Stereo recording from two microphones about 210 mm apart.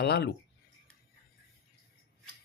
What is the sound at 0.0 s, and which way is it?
Speech, 55° left (ahead or behind).